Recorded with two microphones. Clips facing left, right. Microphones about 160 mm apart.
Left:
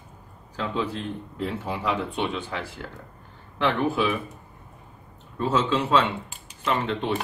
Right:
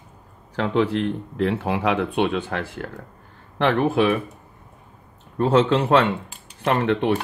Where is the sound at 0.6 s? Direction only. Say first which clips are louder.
Right 8 dB; 75° right (ahead or behind).